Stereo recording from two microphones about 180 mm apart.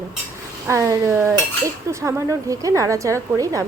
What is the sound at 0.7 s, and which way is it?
A woman's voice, 15° right (ahead or behind).